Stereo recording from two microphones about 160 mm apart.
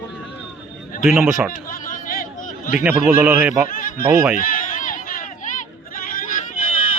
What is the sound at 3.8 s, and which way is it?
Snicker, 55° left (ahead or behind).